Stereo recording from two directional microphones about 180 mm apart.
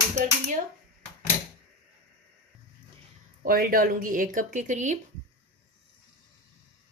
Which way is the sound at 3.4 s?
55° right (ahead or behind).